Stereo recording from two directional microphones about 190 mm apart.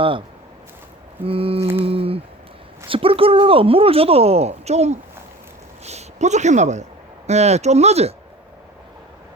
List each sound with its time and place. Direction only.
1.2 s speech: 30° right (ahead or behind)